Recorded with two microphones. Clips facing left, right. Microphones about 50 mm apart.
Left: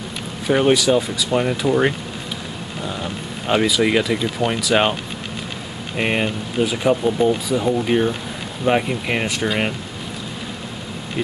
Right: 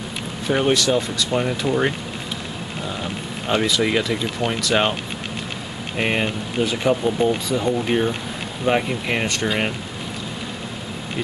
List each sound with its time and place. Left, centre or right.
0.5 s speech: centre
3.4 s speech: centre
5.9 s speech: centre